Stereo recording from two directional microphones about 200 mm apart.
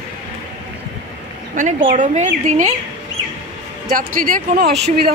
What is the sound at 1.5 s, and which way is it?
Speech, 40° right (ahead or behind).